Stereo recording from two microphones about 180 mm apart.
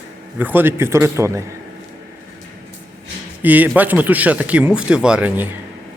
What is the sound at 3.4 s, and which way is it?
A man's voice, 10° right (ahead or behind).